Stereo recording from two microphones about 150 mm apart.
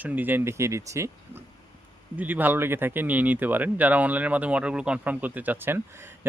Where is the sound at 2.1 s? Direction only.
10° right (ahead or behind).